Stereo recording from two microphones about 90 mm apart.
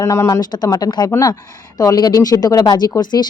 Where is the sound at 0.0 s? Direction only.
35° left (ahead or behind).